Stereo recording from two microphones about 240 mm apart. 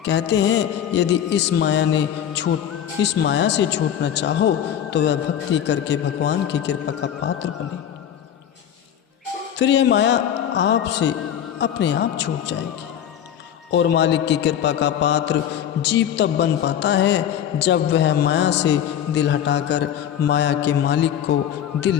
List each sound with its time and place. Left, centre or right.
0.0 s speech: left
9.6 s speech: left
13.7 s speech: left